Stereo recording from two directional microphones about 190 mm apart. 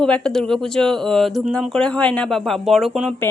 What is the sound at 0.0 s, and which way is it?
A woman's voice, 5° left (ahead or behind).